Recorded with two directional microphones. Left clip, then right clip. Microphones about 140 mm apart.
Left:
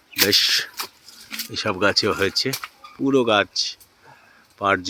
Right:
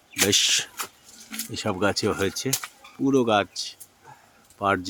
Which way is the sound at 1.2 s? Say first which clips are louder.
Left 5 dB; 75° left (ahead or behind).